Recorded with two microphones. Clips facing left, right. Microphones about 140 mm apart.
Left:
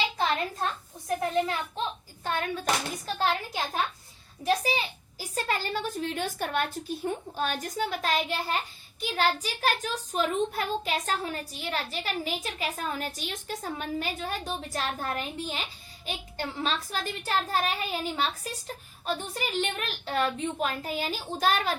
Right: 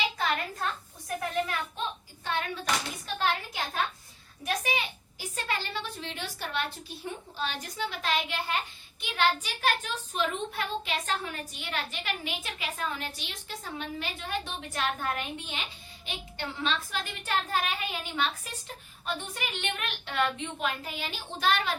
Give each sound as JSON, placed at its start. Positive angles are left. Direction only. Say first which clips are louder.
{"t": 0.2, "sound": "a child's voice", "louder": "left 3 dB", "side_deg": 25}
{"t": 2.2, "sound": "a woman's voice", "louder": "left 3 dB", "side_deg": 45}